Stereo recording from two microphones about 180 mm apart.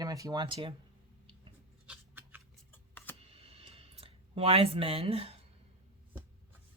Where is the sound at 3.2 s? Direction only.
35° right (ahead or behind).